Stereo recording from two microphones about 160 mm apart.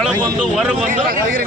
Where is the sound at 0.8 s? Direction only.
60° right (ahead or behind).